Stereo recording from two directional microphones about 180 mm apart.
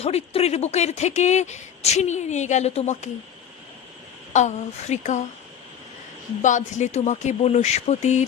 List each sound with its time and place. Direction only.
0.0 s speech: 35° left (ahead or behind)
4.3 s speech: 40° left (ahead or behind)
6.4 s speech: 45° left (ahead or behind)